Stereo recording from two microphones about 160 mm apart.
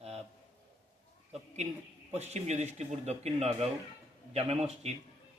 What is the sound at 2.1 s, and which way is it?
A man's voice, 45° right (ahead or behind).